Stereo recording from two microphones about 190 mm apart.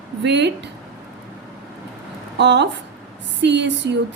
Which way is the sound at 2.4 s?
65° right (ahead or behind).